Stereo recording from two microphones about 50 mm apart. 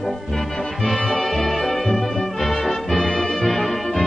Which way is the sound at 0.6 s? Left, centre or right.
Centre.